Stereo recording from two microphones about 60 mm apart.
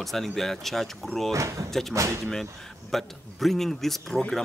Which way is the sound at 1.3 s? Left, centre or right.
Right.